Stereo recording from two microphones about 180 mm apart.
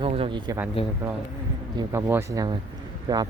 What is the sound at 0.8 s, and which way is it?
Speech, 35° left (ahead or behind).